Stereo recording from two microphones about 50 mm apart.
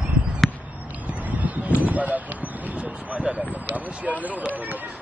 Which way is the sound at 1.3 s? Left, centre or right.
Right.